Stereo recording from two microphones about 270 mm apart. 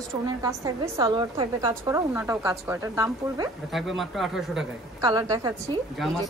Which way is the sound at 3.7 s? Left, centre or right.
Centre.